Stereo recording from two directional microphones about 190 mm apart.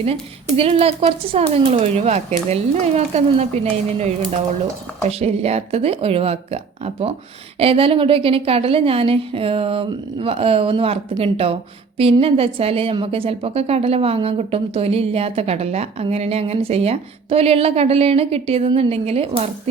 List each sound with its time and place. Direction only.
0.5 s a woman's voice: 30° right (ahead or behind)